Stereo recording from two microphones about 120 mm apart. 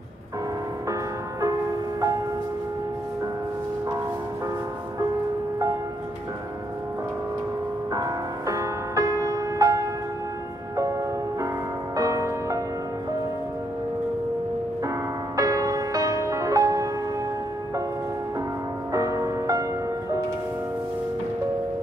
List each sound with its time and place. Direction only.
7.9 s music: 30° right (ahead or behind)
11.9 s music: 25° right (ahead or behind)
15.3 s music: 30° right (ahead or behind)
18.9 s music: 25° right (ahead or behind)